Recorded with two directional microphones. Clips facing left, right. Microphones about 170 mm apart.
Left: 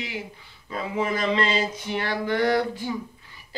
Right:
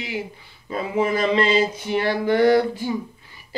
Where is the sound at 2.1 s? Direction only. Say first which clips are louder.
Right 6 dB; 30° right (ahead or behind).